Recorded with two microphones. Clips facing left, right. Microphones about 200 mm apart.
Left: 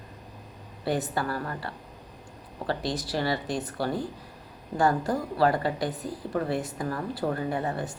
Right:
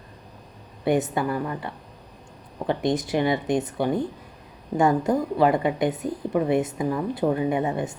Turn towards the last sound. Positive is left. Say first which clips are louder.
# right 5 dB
turn(degrees=-20)  # may be behind; listen again after turning